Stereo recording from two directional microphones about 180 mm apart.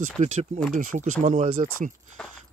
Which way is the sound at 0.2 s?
40° right (ahead or behind).